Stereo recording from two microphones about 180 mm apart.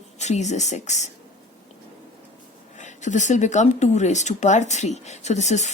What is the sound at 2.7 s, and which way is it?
A woman's voice, 40° left (ahead or behind).